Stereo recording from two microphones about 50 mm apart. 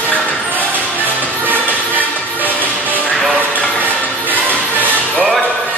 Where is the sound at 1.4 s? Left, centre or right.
Right.